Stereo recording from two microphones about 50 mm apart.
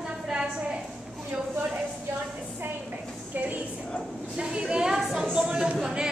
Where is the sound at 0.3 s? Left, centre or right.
Right.